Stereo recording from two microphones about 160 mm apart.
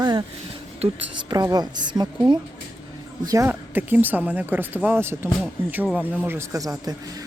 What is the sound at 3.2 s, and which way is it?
Speech, 15° right (ahead or behind).